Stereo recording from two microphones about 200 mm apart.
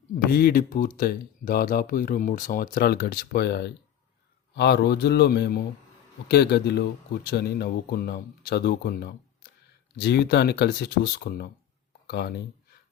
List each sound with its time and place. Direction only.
0.3 s speech: 50° left (ahead or behind)